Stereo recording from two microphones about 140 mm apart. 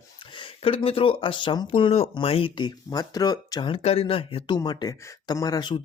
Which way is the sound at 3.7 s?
45° left (ahead or behind).